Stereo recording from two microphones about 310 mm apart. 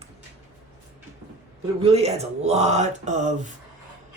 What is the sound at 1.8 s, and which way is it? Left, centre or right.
Speech, centre.